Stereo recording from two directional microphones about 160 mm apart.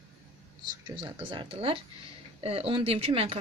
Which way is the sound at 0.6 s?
25° right (ahead or behind).